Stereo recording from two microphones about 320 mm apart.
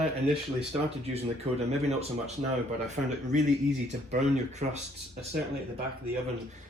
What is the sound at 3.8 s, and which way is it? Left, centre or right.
Speech, right.